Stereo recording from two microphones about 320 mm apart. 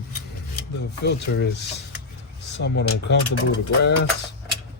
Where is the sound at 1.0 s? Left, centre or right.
Left.